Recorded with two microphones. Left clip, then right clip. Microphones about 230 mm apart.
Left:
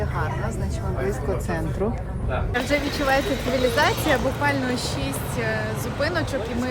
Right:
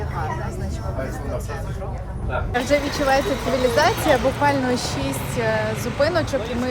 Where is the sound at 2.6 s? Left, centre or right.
Centre.